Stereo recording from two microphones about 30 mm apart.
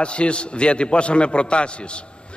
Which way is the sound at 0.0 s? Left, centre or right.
Left.